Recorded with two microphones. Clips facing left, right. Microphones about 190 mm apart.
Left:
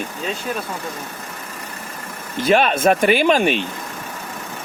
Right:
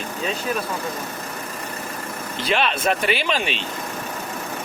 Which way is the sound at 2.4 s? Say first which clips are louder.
Left 7 dB; 45° left (ahead or behind).